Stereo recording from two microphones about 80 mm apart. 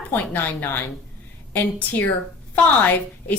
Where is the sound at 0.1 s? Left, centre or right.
Left.